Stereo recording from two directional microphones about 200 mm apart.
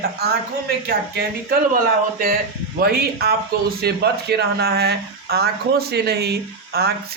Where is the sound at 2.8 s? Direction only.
50° right (ahead or behind).